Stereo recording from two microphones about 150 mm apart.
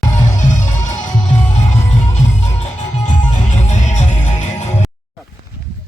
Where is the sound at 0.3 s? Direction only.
55° left (ahead or behind).